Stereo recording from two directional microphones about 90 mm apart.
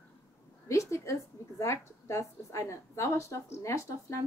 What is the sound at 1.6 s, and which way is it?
A woman's voice, 35° left (ahead or behind).